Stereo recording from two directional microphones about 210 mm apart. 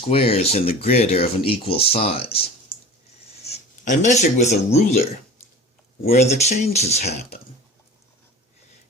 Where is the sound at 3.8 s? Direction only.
35° left (ahead or behind).